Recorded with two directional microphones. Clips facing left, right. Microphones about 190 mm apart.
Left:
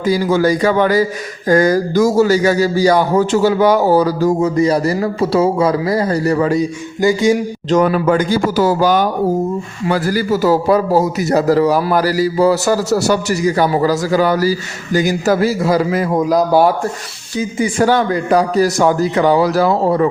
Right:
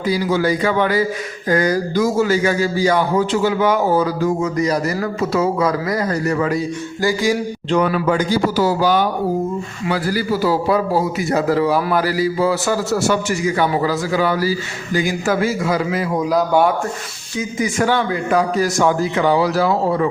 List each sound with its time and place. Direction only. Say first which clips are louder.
0.0 s speech: left 4 dB; 45° left (ahead or behind)
6.6 s a sound: left 4 dB; 20° left (ahead or behind)
7.7 s a man's voice: left 4 dB; 40° left (ahead or behind)